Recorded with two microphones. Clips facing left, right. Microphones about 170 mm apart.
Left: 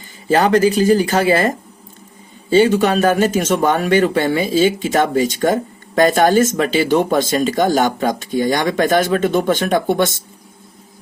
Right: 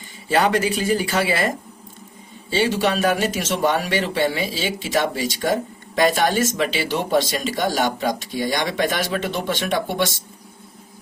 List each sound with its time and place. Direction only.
0.3 s speech: 40° left (ahead or behind)